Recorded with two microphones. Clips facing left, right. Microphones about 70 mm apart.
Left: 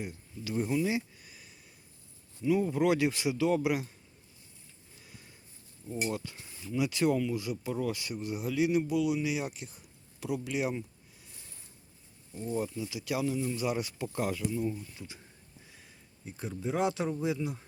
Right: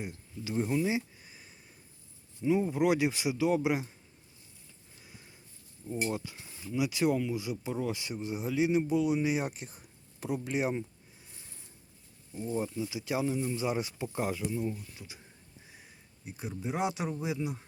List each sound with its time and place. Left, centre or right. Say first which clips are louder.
0.4 s a sound: even; centre
2.4 s speech: even; right
5.0 s a sound: even; right
5.8 s speech: right 2 dB; right
6.2 s speech: even; centre; by 10.8 s right
12.4 s speech: even; right; by 15.2 s centre
15.7 s speech: right 1 dB; centre